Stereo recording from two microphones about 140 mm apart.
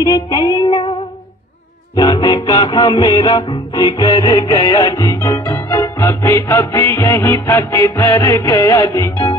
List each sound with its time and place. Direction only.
0.0 s child singing: 30° left (ahead or behind)
2.0 s music: 30° left (ahead or behind)